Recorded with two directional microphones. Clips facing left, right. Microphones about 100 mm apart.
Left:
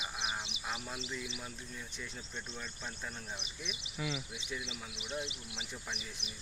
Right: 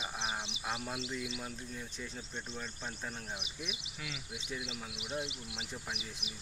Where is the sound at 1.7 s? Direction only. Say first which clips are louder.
Right 2 dB; 35° right (ahead or behind).